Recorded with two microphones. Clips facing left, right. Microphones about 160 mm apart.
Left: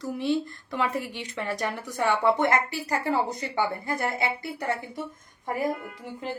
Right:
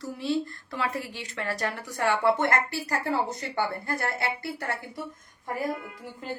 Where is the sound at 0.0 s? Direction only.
20° left (ahead or behind).